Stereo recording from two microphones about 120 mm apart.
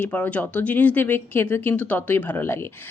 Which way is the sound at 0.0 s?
15° left (ahead or behind).